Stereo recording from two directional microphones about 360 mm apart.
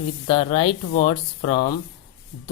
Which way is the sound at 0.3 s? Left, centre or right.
Centre.